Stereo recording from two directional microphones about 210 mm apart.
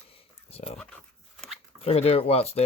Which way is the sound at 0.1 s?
30° left (ahead or behind).